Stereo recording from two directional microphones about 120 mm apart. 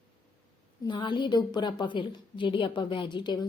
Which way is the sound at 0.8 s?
40° left (ahead or behind).